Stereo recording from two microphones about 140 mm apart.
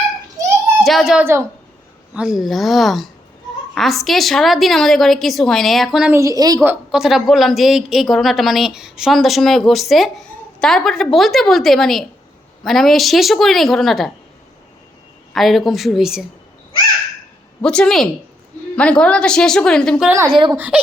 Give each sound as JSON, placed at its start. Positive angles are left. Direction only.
{"t": 0.9, "sound": "speech", "side_deg": 0}
{"t": 1.2, "sound": "a woman's voice", "side_deg": -20}
{"t": 2.1, "sound": "speech", "side_deg": -5}
{"t": 6.1, "sound": "a woman's voice", "side_deg": -20}
{"t": 6.6, "sound": "a woman's voice", "side_deg": -15}
{"t": 7.0, "sound": "speech", "side_deg": 0}
{"t": 15.3, "sound": "speech", "side_deg": 0}
{"t": 17.6, "sound": "speech", "side_deg": 5}
{"t": 20.1, "sound": "a woman's voice", "side_deg": -15}